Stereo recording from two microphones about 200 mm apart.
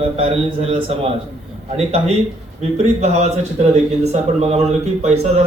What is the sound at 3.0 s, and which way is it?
Speech, 35° right (ahead or behind).